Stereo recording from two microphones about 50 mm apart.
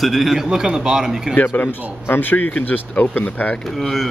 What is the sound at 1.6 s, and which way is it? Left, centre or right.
Speech, left.